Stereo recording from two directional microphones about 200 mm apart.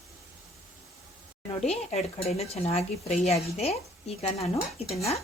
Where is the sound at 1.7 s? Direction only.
30° left (ahead or behind).